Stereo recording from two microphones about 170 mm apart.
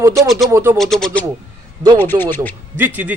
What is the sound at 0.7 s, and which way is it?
Speech, centre (ahead or behind).